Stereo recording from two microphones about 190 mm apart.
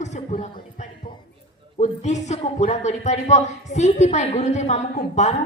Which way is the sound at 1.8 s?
40° left (ahead or behind).